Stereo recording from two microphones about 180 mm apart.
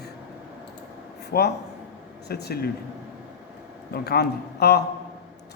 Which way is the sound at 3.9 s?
65° left (ahead or behind).